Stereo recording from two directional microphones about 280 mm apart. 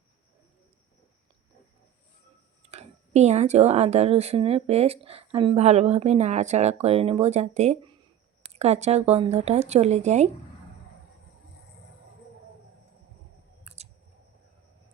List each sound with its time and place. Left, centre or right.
2.6 s speech: right
13.7 s scissors: right